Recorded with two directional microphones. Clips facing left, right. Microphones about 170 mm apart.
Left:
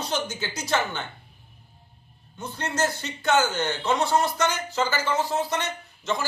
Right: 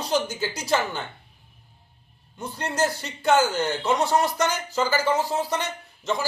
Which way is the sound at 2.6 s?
35° right (ahead or behind).